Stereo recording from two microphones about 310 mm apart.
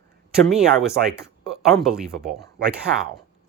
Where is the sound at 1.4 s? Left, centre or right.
Centre.